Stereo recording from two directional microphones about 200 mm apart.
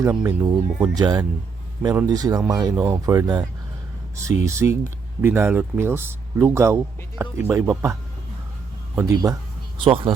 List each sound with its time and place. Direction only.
0.0 s speech: 10° right (ahead or behind)
9.0 s speech: 15° right (ahead or behind)